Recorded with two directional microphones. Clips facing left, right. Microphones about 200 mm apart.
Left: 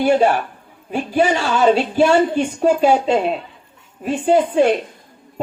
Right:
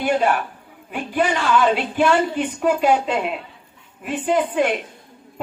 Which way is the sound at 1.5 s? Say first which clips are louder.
Left 5 dB; 30° left (ahead or behind).